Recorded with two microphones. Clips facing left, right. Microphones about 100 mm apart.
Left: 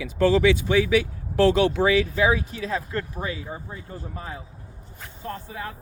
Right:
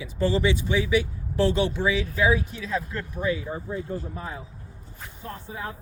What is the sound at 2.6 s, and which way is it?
Speech, 55° left (ahead or behind).